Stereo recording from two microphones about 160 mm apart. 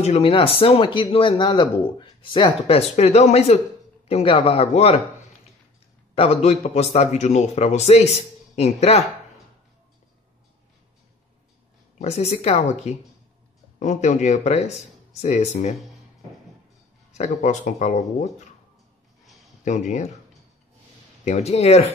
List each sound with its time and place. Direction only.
0.0 s speech: 40° left (ahead or behind)
6.1 s a man's voice: 40° left (ahead or behind)
12.0 s a man's voice: 45° left (ahead or behind)
17.1 s a man's voice: 45° left (ahead or behind)
19.6 s a man's voice: 50° left (ahead or behind)
21.2 s speech: 45° left (ahead or behind)